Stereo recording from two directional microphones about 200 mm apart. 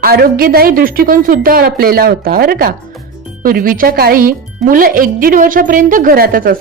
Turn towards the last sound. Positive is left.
turn(degrees=-45)  # may be behind; listen again after turning